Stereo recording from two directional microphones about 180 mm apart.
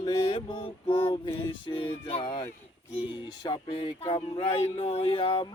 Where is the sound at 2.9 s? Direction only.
30° left (ahead or behind).